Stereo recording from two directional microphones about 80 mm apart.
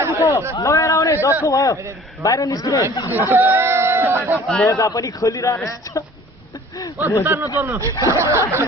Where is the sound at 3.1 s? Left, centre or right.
Right.